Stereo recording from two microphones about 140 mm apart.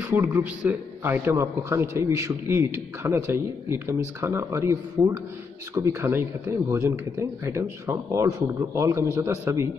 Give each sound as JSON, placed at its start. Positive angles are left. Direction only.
{"t": 0.0, "sound": "a man's voice", "side_deg": -10}